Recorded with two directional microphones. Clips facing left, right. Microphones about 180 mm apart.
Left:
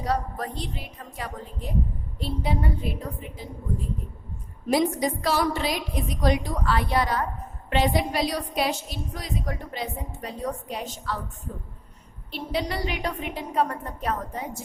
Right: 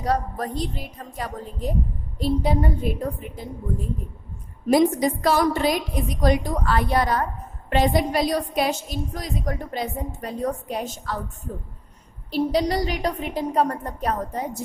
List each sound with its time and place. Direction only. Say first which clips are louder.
0.0 s a woman's voice: right 3 dB; 45° right (ahead or behind)
4.7 s a woman's voice: right 5 dB; 50° right (ahead or behind)
12.3 s a woman's voice: right 8 dB; 40° right (ahead or behind)